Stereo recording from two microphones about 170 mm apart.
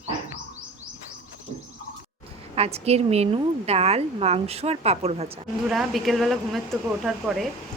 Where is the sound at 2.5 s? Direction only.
35° right (ahead or behind).